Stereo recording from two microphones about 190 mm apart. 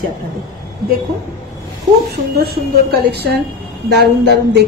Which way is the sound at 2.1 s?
55° right (ahead or behind).